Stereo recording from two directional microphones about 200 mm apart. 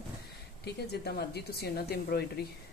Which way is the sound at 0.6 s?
55° left (ahead or behind).